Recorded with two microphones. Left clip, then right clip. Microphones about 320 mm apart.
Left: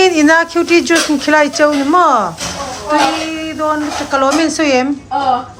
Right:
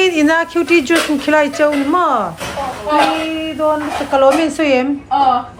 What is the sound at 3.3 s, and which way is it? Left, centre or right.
Speech, centre.